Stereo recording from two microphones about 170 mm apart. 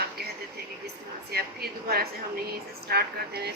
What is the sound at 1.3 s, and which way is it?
A woman's voice, 65° right (ahead or behind).